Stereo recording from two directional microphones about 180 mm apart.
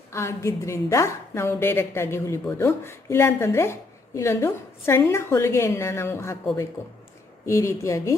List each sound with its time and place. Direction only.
0.1 s a woman's voice: 15° left (ahead or behind)
7.4 s a woman's voice: 15° left (ahead or behind)